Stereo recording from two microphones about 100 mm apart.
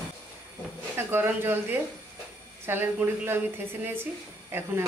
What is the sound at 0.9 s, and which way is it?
A woman's voice, 20° right (ahead or behind).